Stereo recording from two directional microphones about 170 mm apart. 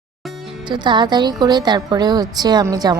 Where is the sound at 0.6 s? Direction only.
25° right (ahead or behind).